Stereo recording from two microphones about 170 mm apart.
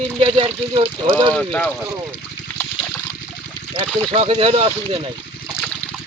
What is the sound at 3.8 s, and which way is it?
Speech, 30° right (ahead or behind).